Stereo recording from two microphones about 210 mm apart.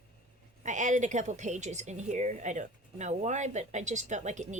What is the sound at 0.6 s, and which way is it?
Speech, 35° right (ahead or behind).